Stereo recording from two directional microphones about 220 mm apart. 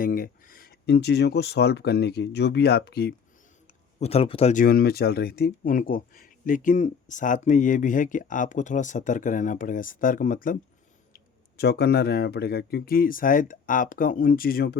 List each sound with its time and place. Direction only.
0.0 s speech: 40° left (ahead or behind)
4.0 s speech: 25° left (ahead or behind)
4.6 s speech: 45° left (ahead or behind)
11.6 s speech: 45° left (ahead or behind)